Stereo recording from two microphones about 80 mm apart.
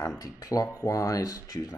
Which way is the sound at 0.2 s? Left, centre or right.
Left.